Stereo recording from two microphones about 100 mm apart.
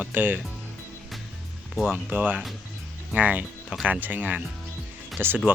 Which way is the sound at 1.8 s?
15° right (ahead or behind).